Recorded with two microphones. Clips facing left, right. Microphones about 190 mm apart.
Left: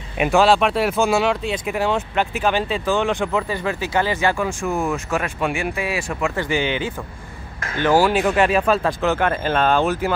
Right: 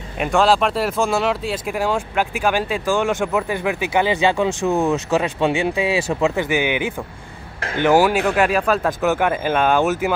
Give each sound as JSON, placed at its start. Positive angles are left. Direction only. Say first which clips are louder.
{"t": 0.2, "sound": "speech", "louder": "left 1 dB", "side_deg": 5}
{"t": 3.4, "sound": "speech", "louder": "right 2 dB", "side_deg": -15}
{"t": 6.4, "sound": "speech", "louder": "right 2 dB", "side_deg": -10}
{"t": 8.2, "sound": "speech", "louder": "even", "side_deg": 0}